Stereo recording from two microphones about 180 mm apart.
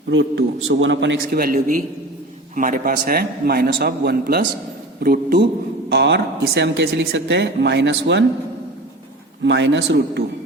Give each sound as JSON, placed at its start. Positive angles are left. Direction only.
{"t": 0.1, "sound": "a man's voice", "side_deg": -90}
{"t": 1.2, "sound": "a man's voice", "side_deg": -55}
{"t": 5.9, "sound": "speech", "side_deg": -70}
{"t": 9.4, "sound": "speech", "side_deg": -80}